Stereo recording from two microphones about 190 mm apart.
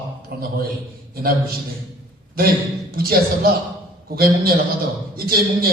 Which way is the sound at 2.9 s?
50° right (ahead or behind).